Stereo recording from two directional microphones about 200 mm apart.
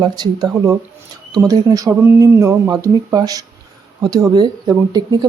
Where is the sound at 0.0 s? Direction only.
20° right (ahead or behind).